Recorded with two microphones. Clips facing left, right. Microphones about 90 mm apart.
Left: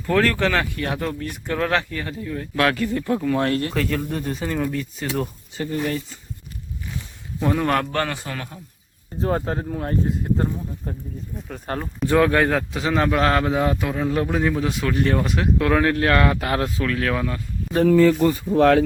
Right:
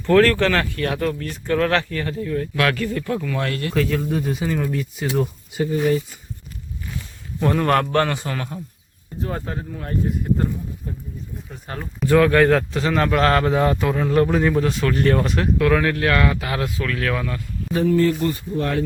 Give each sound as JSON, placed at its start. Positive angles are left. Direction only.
{"t": 0.0, "sound": "speech", "side_deg": 10}
{"t": 3.8, "sound": "speech", "side_deg": 0}
{"t": 5.8, "sound": "speech", "side_deg": -15}
{"t": 7.3, "sound": "speech", "side_deg": 5}
{"t": 9.2, "sound": "speech", "side_deg": 40}
{"t": 10.8, "sound": "speech", "side_deg": 50}
{"t": 12.0, "sound": "speech", "side_deg": 20}
{"t": 15.5, "sound": "speech", "side_deg": 25}
{"t": 18.5, "sound": "speech", "side_deg": 90}